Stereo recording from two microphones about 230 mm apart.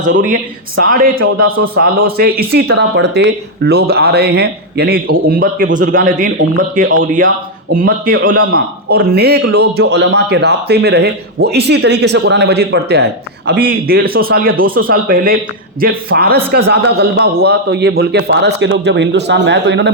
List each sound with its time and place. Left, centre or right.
0.8 s a man's voice: right